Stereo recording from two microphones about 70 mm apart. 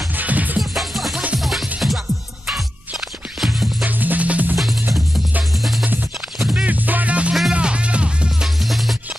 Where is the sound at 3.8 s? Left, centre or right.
Right.